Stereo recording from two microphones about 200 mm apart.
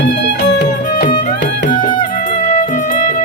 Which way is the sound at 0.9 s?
40° left (ahead or behind).